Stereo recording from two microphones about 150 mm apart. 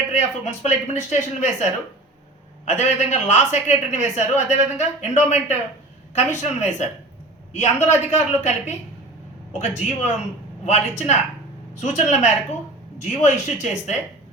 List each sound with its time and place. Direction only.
0.1 s speech: 50° left (ahead or behind)
2.6 s speech: 50° left (ahead or behind)